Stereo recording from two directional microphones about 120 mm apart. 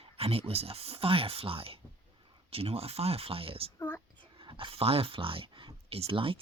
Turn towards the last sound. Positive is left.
turn(degrees=-45)  # may be behind; listen again after turning